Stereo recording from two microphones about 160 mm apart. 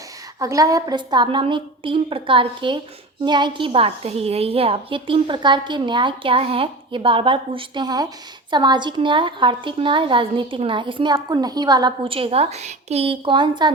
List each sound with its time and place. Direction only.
0.3 s a woman's voice: 20° right (ahead or behind)